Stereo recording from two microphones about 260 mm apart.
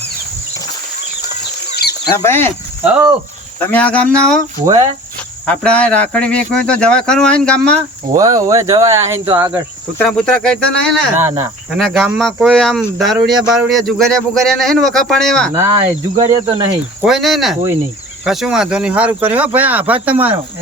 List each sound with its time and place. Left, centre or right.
1.7 s chicken: left
2.0 s speech: centre
3.7 s speech: centre
4.6 s speech: centre
5.5 s speech: centre
8.1 s speech: centre
10.0 s speech: centre
11.2 s speech: centre
16.1 s speech: centre
17.0 s speech: centre